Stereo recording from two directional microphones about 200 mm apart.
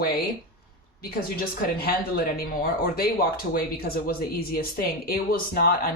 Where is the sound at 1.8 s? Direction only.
50° left (ahead or behind).